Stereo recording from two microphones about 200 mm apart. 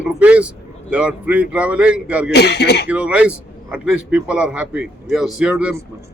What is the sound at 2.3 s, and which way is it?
Speech, 55° left (ahead or behind).